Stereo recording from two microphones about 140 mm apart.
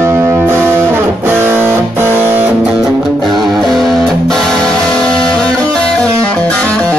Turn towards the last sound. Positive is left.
turn(degrees=10)  # may be behind; listen again after turning